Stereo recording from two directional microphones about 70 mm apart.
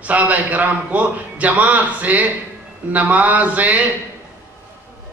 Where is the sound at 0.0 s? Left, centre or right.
Right.